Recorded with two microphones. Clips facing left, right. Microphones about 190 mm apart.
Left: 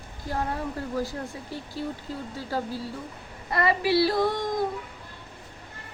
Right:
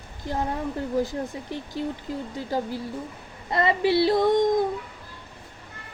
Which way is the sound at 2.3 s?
15° right (ahead or behind).